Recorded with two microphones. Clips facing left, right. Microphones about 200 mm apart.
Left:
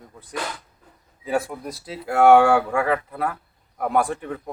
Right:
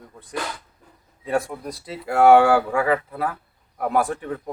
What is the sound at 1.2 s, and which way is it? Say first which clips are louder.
Speech: right 1 dB; centre (ahead or behind).